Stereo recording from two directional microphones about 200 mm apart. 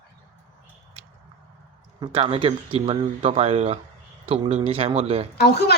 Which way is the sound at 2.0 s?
30° right (ahead or behind).